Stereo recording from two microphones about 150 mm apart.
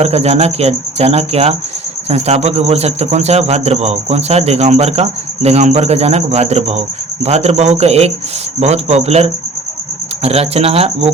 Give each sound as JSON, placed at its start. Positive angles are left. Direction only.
{"t": 0.0, "sound": "speech", "side_deg": -45}